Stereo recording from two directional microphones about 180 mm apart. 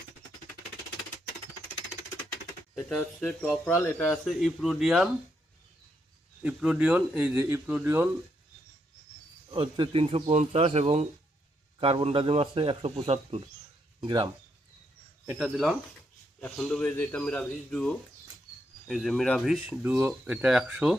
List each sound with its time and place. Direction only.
2.9 s speech: 5° left (ahead or behind)
6.4 s speech: 5° right (ahead or behind)
9.5 s speech: 25° right (ahead or behind)
15.3 s speech: 5° right (ahead or behind)